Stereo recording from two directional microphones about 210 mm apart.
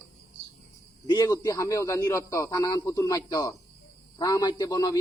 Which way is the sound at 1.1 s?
20° left (ahead or behind).